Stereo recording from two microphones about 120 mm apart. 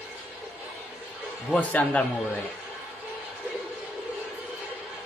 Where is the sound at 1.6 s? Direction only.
10° left (ahead or behind).